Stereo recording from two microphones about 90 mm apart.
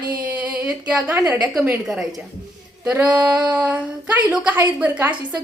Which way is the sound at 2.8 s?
20° right (ahead or behind).